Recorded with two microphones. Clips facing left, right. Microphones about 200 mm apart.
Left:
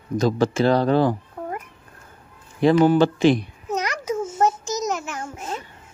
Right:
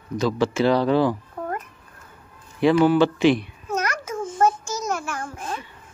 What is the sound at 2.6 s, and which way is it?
Speech, 45° left (ahead or behind).